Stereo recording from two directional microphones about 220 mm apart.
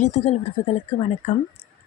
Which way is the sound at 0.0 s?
30° left (ahead or behind).